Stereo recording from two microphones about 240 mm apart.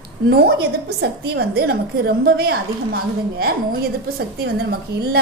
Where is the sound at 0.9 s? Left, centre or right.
Right.